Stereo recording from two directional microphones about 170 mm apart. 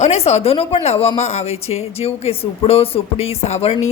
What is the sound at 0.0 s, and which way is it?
A woman's voice, 40° left (ahead or behind).